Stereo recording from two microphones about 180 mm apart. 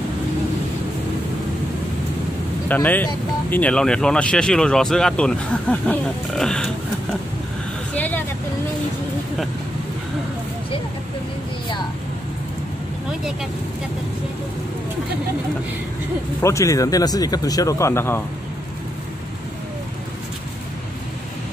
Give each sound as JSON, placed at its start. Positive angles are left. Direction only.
{"t": 2.7, "sound": "speech", "side_deg": 10}
{"t": 7.9, "sound": "vehicle", "side_deg": 10}
{"t": 16.3, "sound": "speech", "side_deg": 15}